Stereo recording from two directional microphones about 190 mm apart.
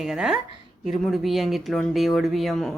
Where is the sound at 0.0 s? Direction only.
5° right (ahead or behind).